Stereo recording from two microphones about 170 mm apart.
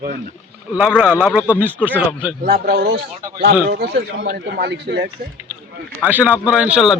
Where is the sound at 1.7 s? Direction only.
10° left (ahead or behind).